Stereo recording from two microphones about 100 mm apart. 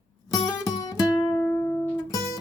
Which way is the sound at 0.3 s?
40° left (ahead or behind).